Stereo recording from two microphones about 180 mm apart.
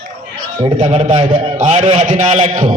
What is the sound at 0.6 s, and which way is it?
A man's voice, 35° right (ahead or behind).